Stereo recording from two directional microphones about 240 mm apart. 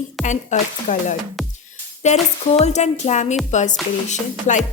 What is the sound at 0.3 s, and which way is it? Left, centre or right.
A woman's voice, left.